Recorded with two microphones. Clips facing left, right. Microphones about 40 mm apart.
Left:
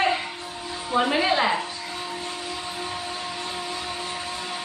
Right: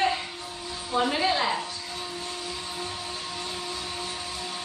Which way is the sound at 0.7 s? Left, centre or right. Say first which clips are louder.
Left 3 dB; left.